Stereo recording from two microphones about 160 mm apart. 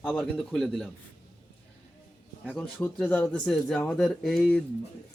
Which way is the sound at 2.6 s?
5° left (ahead or behind).